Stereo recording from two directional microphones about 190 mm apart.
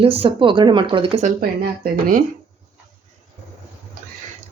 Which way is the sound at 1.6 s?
50° right (ahead or behind).